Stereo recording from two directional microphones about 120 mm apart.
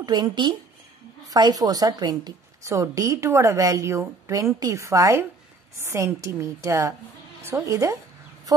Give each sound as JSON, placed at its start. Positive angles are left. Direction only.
{"t": 0.0, "sound": "a woman's voice", "side_deg": -35}